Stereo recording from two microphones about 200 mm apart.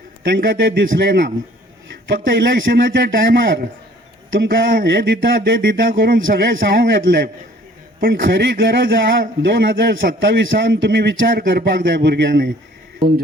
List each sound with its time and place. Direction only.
0.3 s speech: 55° right (ahead or behind)
4.7 s speech: 55° right (ahead or behind)